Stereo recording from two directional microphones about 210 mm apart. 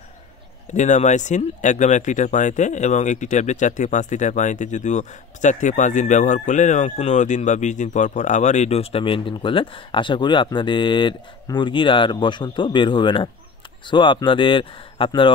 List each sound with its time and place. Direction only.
0.7 s speech: 35° left (ahead or behind)